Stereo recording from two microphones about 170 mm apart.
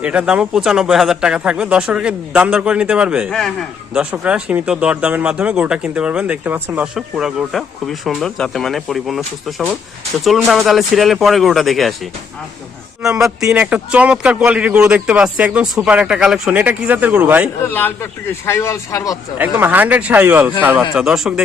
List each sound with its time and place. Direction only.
0.0 s speech: 5° right (ahead or behind)
13.0 s a man's voice: 5° right (ahead or behind)
17.6 s speech: 10° left (ahead or behind)
19.4 s a man's voice: 10° right (ahead or behind)